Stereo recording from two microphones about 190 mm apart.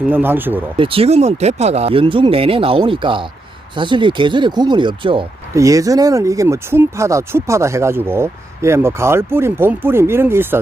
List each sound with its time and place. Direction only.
0.0 s speech: 10° right (ahead or behind)
0.8 s speech: 30° right (ahead or behind); by 10.6 s 10° right (ahead or behind)